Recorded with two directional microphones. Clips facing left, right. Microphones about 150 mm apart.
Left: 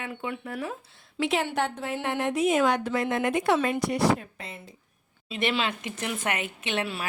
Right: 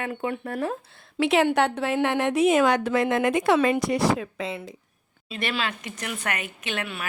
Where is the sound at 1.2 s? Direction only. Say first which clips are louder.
Right 6 dB; 70° right (ahead or behind); by 4.7 s 90° right.